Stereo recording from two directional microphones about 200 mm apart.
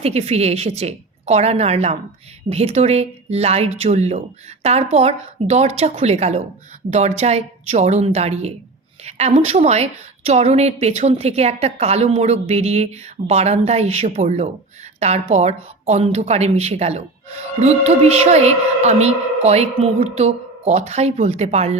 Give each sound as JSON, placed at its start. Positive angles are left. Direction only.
{"t": 0.0, "sound": "a woman's voice", "side_deg": -30}